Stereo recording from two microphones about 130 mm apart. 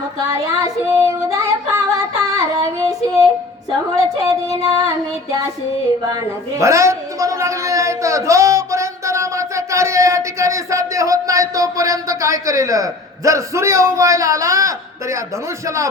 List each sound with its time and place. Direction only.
0.2 s child singing: 25° right (ahead or behind)
1.7 s female singing: 25° right (ahead or behind)
3.9 s a sound: 25° right (ahead or behind)
6.6 s a man's voice: 20° right (ahead or behind)